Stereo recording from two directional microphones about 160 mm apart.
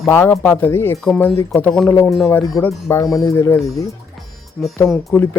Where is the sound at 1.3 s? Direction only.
20° left (ahead or behind).